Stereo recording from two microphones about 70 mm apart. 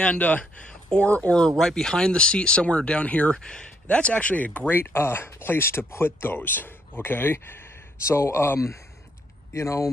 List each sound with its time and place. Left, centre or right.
0.0 s speech: centre; by 9.8 s left